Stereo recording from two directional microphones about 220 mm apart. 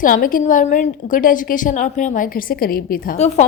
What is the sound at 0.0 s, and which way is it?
A woman's voice, 40° left (ahead or behind).